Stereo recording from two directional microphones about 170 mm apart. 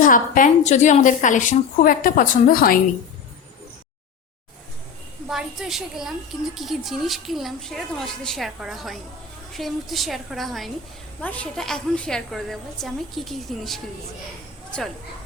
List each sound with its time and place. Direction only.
0.0 s a woman's voice: 50° left (ahead or behind)
5.3 s a woman's voice: centre (ahead or behind)